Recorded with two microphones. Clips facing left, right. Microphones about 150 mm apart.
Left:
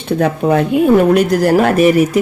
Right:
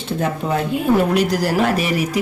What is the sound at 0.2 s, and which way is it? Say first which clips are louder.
Speech: left 7 dB; 60° left (ahead or behind).